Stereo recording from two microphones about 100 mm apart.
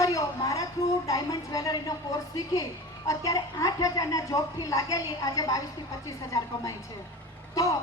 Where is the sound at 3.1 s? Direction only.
35° left (ahead or behind).